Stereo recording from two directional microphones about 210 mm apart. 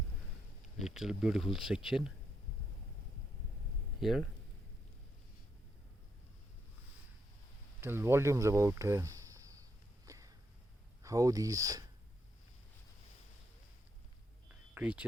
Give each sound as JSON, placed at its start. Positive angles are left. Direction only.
{"t": 0.8, "sound": "speech", "side_deg": 0}
{"t": 4.0, "sound": "speech", "side_deg": 0}
{"t": 7.8, "sound": "speech", "side_deg": -10}
{"t": 10.1, "sound": "a sound", "side_deg": -15}
{"t": 11.0, "sound": "speech", "side_deg": -15}
{"t": 14.8, "sound": "speech", "side_deg": -5}